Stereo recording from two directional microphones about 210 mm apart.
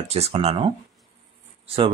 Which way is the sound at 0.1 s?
30° right (ahead or behind).